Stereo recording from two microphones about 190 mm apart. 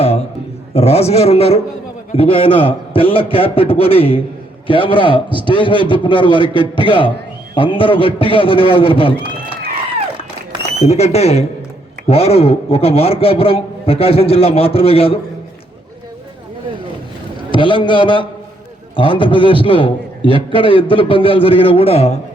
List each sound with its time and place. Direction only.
0.7 s a man's voice: 30° left (ahead or behind)
10.8 s a man's voice: 35° left (ahead or behind)
17.5 s a man's voice: 25° left (ahead or behind)